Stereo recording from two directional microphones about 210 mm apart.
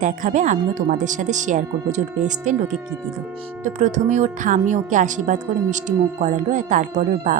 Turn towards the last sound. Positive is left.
turn(degrees=-40)  # may be behind; listen again after turning